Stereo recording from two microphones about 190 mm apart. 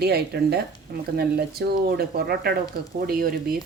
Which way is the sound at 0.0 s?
55° right (ahead or behind).